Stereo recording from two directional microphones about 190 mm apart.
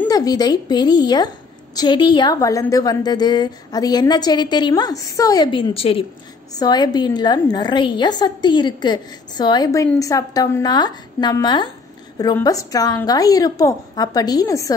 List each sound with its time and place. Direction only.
0.1 s a woman's voice: 20° left (ahead or behind)